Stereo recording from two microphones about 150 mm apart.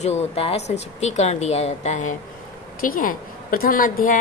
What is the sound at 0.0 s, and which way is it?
A woman's voice, 45° left (ahead or behind).